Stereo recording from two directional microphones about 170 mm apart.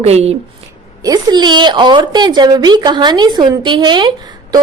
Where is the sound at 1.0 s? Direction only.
25° right (ahead or behind).